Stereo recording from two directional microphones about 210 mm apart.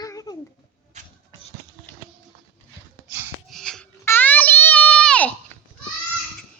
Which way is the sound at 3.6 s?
5° left (ahead or behind).